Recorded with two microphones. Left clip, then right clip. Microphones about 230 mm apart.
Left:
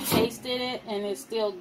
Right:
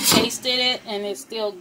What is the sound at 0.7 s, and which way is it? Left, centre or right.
Speech, right.